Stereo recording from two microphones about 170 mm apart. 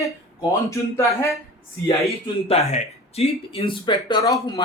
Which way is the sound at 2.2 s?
35° left (ahead or behind).